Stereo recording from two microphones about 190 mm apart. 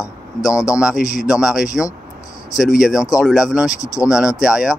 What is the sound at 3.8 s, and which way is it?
Speech, 15° left (ahead or behind).